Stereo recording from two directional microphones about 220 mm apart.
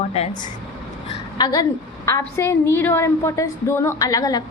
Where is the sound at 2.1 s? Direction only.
15° left (ahead or behind).